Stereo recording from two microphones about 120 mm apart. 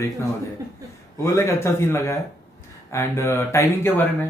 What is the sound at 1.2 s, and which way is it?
Speech, 25° left (ahead or behind).